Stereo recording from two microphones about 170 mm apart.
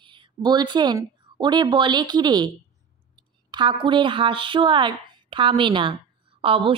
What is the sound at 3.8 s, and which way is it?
A woman's voice, 30° right (ahead or behind).